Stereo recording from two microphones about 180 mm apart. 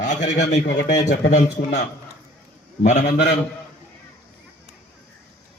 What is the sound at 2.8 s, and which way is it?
Speech, 40° left (ahead or behind).